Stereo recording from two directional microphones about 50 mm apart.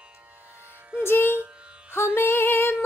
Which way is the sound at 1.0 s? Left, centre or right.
Left.